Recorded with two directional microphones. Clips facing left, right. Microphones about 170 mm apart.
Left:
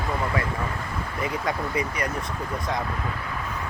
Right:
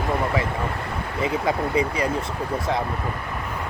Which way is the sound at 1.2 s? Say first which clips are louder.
Right 5 dB; 30° right (ahead or behind).